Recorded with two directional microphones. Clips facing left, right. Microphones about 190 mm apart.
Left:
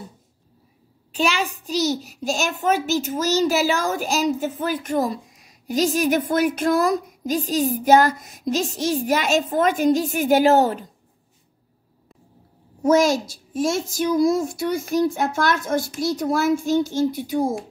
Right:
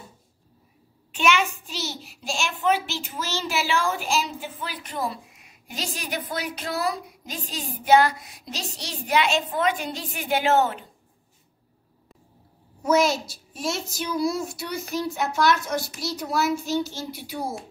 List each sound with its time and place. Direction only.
1.1 s a child's voice: 35° left (ahead or behind)
12.8 s a child's voice: 45° left (ahead or behind)